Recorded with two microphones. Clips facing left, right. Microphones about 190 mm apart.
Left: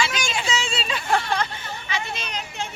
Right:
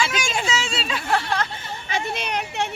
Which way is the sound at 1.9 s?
60° right (ahead or behind).